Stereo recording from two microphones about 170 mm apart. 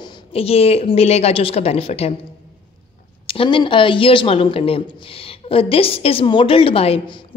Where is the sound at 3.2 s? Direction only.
30° left (ahead or behind).